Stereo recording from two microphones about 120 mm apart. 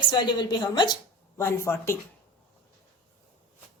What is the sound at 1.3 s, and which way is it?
Speech, 20° left (ahead or behind).